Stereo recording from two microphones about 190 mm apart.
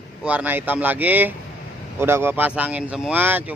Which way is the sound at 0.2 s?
5° right (ahead or behind).